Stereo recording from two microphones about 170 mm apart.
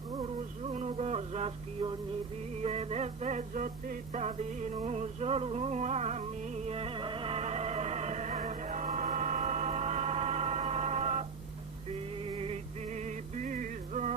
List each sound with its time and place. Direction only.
0.2 s music: 40° right (ahead or behind)